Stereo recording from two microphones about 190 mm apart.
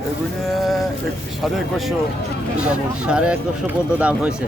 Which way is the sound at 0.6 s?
Centre (ahead or behind).